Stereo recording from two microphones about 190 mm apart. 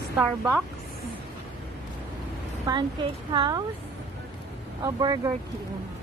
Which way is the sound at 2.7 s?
25° right (ahead or behind).